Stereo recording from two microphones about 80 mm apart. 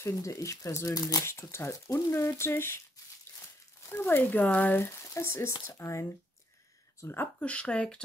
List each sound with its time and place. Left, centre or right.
0.1 s speech: left
3.8 s speech: left
7.3 s speech: centre